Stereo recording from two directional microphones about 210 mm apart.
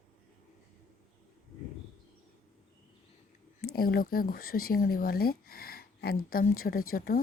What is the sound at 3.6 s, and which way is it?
Speech, 45° left (ahead or behind).